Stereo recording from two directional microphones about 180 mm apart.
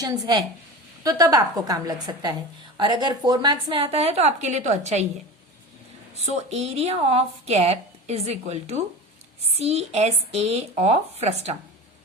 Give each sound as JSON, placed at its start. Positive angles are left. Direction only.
{"t": 1.0, "sound": "a woman's voice", "side_deg": -20}
{"t": 6.2, "sound": "speech", "side_deg": -35}